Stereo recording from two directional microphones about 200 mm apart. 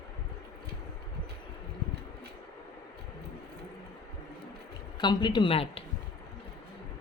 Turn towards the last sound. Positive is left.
turn(degrees=30)  # may be behind; listen again after turning